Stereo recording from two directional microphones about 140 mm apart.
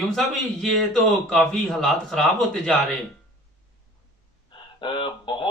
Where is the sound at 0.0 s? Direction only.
Centre (ahead or behind).